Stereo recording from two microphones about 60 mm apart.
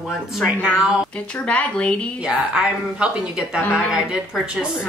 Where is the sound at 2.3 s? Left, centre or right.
Centre.